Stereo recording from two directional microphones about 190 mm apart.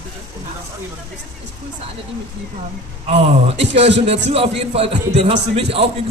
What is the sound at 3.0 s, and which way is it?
A man's voice, 30° right (ahead or behind).